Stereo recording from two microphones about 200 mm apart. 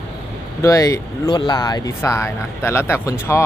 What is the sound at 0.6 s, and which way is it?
Speech, 15° left (ahead or behind).